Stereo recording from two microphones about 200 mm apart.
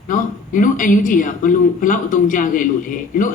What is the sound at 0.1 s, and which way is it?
A man's voice, 40° left (ahead or behind).